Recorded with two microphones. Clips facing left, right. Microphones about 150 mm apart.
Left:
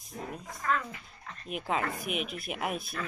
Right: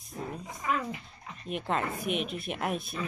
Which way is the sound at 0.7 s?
20° right (ahead or behind).